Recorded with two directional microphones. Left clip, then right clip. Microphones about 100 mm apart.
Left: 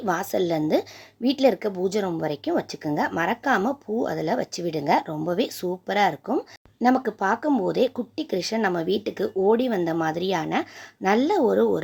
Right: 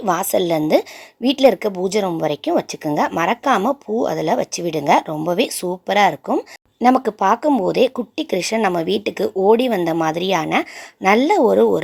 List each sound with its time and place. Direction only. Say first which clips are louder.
0.0 s speech: right 6 dB; 45° right (ahead or behind)
2.8 s speech: right 6 dB; 55° right (ahead or behind)